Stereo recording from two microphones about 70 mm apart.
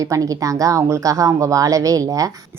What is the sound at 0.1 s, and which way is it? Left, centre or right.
A woman's voice, right.